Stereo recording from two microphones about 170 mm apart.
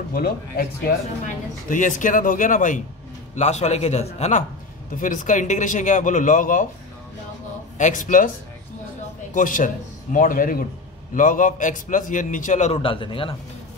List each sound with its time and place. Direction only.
0.1 s speech: 60° left (ahead or behind)
1.7 s a man's voice: 50° left (ahead or behind)
7.7 s speech: 50° left (ahead or behind)
9.3 s a man's voice: 50° left (ahead or behind); by 13.4 s 30° left (ahead or behind)